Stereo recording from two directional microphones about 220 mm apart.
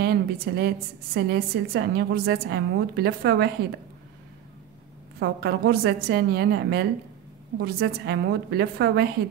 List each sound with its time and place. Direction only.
0.0 s a woman's voice: 45° right (ahead or behind)
5.2 s a woman's voice: 45° right (ahead or behind)